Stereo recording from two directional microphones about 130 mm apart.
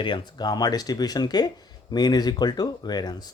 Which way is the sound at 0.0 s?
35° left (ahead or behind).